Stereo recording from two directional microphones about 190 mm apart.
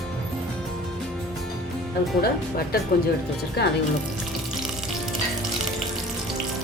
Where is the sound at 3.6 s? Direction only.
60° left (ahead or behind).